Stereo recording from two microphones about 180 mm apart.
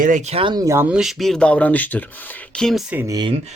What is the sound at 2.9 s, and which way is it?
Speech, 10° right (ahead or behind).